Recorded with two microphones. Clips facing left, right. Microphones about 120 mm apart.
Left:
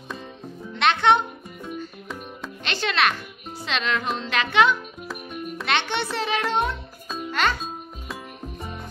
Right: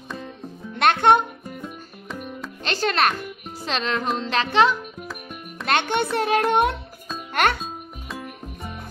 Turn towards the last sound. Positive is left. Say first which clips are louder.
# right 2 dB
turn(degrees=-60)  # may be behind; listen again after turning